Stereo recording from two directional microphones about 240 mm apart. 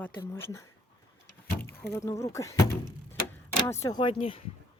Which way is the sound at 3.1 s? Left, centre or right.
Centre.